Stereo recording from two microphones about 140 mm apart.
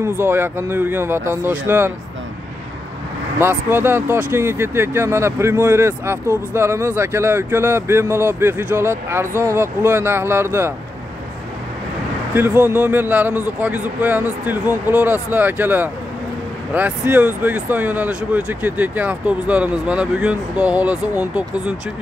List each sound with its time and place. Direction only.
0.0 s speech: 15° right (ahead or behind)
3.3 s speech: 15° right (ahead or behind)
12.4 s speech: 15° right (ahead or behind)